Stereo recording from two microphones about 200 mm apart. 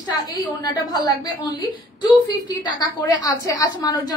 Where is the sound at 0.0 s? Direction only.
20° left (ahead or behind).